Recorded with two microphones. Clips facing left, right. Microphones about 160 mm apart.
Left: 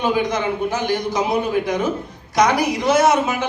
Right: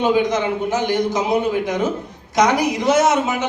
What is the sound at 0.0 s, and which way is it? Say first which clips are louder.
A man's voice: right 3 dB; 20° right (ahead or behind).